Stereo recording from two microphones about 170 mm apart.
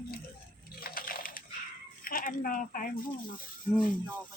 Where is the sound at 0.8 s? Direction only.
55° left (ahead or behind).